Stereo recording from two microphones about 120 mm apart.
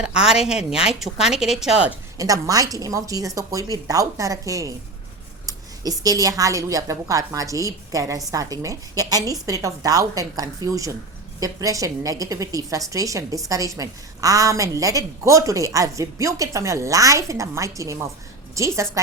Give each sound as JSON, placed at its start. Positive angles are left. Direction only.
{"t": 0.0, "sound": "speech", "side_deg": -5}
{"t": 2.1, "sound": "a woman's voice", "side_deg": -30}